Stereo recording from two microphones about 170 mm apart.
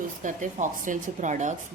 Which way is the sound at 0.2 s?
50° right (ahead or behind).